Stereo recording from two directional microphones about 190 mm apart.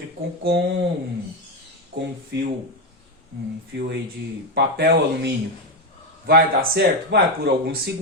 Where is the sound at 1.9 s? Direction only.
60° right (ahead or behind).